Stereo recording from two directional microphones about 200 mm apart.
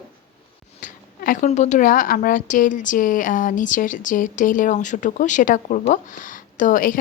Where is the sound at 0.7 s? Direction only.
40° left (ahead or behind).